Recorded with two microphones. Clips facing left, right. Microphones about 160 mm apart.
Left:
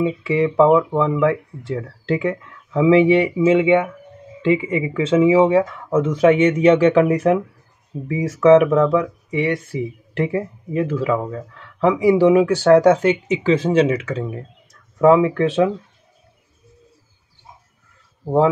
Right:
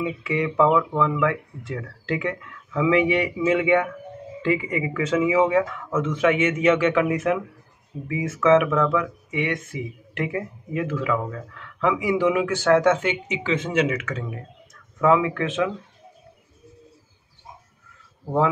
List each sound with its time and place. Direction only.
0.0 s speech: 30° left (ahead or behind)